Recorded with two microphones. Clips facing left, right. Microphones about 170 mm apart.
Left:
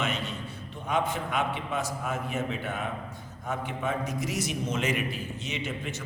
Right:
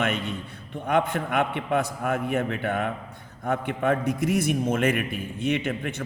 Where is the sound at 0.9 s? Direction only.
60° right (ahead or behind).